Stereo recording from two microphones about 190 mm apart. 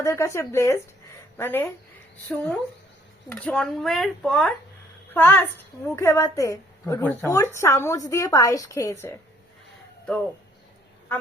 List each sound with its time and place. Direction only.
0.0 s a woman's voice: 15° left (ahead or behind)